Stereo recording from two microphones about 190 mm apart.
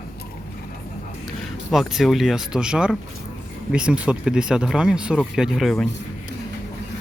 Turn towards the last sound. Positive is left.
turn(degrees=0)  # may be behind; listen again after turning